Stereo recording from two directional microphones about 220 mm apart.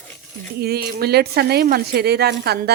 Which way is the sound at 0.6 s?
45° right (ahead or behind).